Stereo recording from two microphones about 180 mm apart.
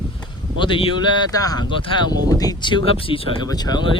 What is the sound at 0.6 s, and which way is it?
Speech, 30° left (ahead or behind).